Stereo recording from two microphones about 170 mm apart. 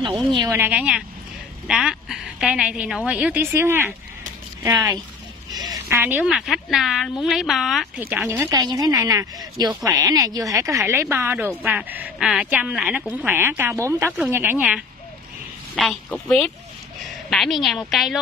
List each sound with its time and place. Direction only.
0.3 s a woman's voice: 25° right (ahead or behind)
0.6 s a woman's voice: 10° right (ahead or behind)
8.5 s a woman's voice: 20° right (ahead or behind)
15.7 s a woman's voice: centre (ahead or behind)